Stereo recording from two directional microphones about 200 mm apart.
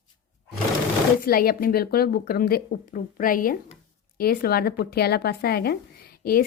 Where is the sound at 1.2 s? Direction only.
45° left (ahead or behind).